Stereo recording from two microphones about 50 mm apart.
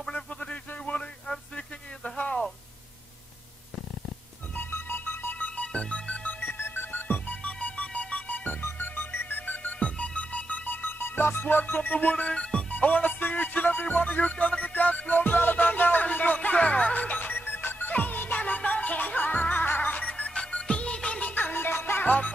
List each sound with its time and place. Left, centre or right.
0.0 s radio: centre
2.0 s a sound: left
4.6 s music: left
5.6 s music: centre
6.2 s music: left
9.5 s music: left
12.3 s music: centre
12.7 s music: left
20.1 s music: centre
21.4 s music: left
22.0 s music: left